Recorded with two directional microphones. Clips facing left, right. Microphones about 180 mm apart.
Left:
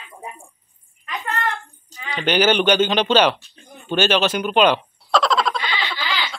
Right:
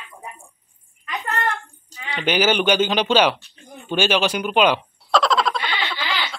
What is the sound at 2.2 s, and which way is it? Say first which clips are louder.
Speech: left 2 dB; 5° right (ahead or behind).